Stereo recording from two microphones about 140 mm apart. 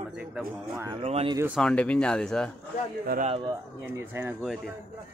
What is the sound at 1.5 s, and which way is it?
Speech, 5° left (ahead or behind).